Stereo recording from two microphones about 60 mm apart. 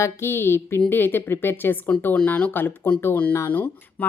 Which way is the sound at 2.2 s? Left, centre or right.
Left.